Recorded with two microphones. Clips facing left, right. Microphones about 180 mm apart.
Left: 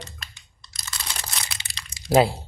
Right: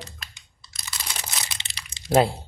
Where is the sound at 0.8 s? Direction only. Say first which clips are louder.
Even; 20° right (ahead or behind).